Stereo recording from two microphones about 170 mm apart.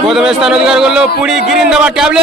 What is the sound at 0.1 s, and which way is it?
A man's voice, 5° right (ahead or behind).